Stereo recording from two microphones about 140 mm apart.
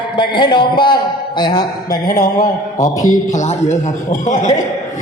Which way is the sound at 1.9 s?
90° left.